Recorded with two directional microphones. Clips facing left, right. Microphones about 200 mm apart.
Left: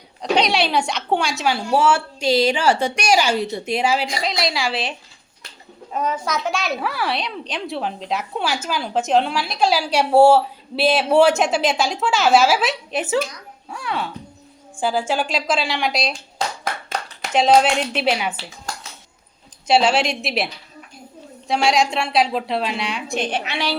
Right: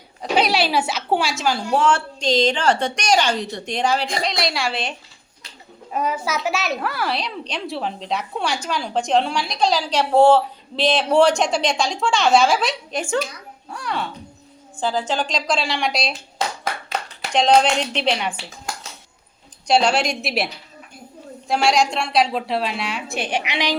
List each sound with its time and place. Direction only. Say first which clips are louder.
0.2 s a woman's voice: even; 5° right (ahead or behind)
5.9 s a child's voice: even; 10° right (ahead or behind)
17.3 s a child's voice: left 1 dB; 5° left (ahead or behind)
19.6 s a child's voice: left 1 dB; 5° left (ahead or behind); by 23.7 s 15° right (ahead or behind)